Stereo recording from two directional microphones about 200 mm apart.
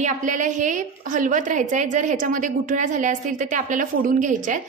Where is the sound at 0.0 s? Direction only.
40° right (ahead or behind).